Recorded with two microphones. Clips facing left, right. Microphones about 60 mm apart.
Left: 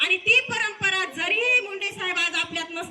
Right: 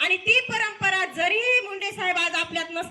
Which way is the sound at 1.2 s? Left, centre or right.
Centre.